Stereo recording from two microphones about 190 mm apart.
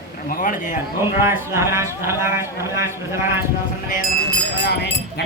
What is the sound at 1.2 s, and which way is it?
Speech, 15° right (ahead or behind).